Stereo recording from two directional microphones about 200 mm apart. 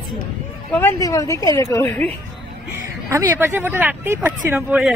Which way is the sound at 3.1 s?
10° right (ahead or behind).